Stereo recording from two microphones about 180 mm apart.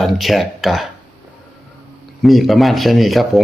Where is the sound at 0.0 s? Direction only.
Centre (ahead or behind).